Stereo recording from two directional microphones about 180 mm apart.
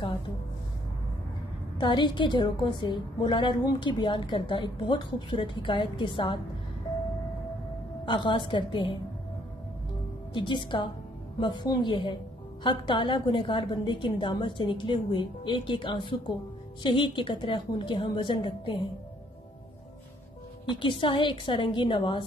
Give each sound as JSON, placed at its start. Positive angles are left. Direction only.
{"t": 1.8, "sound": "a woman's voice", "side_deg": 25}
{"t": 8.0, "sound": "a woman's voice", "side_deg": 25}
{"t": 10.3, "sound": "a woman's voice", "side_deg": 25}
{"t": 20.6, "sound": "a woman's voice", "side_deg": 25}